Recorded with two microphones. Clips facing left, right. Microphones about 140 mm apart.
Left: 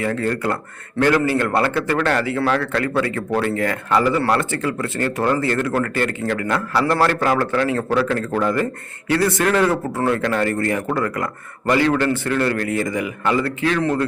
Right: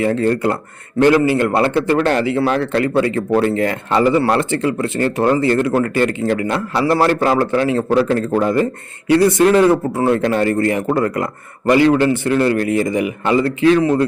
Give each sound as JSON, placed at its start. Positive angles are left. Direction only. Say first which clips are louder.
{"t": 0.0, "sound": "speech", "louder": "right 6 dB", "side_deg": -25}